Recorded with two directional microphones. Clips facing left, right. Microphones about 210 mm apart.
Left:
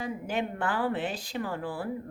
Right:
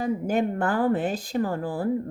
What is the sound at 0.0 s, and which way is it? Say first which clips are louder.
Speech: right 7 dB; 45° right (ahead or behind).